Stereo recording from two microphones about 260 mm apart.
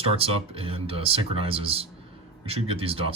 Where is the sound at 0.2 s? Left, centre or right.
Right.